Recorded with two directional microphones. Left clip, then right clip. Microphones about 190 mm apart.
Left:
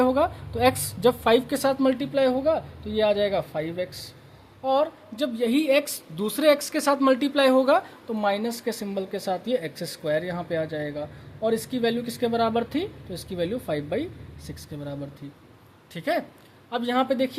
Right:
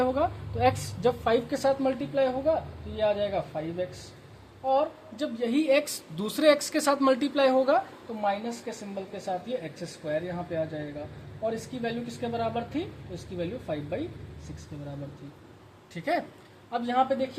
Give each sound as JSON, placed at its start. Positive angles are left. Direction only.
{"t": 0.0, "sound": "a woman's voice", "side_deg": 25}
{"t": 5.1, "sound": "a woman's voice", "side_deg": 35}
{"t": 8.2, "sound": "speech", "side_deg": 55}
{"t": 16.0, "sound": "a woman's voice", "side_deg": 35}
{"t": 16.7, "sound": "a woman's voice", "side_deg": 45}